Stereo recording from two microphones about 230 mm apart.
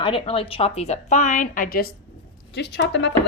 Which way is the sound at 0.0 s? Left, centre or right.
Left.